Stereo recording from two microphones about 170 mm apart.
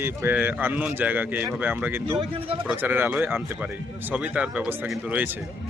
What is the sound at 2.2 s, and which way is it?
Speech, 30° right (ahead or behind).